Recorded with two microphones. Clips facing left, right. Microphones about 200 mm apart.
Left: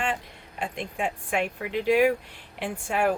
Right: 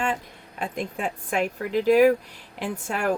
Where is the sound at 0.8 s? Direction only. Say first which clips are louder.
Right 1 dB; 40° right (ahead or behind).